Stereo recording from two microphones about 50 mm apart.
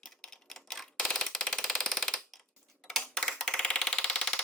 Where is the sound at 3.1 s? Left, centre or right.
Centre.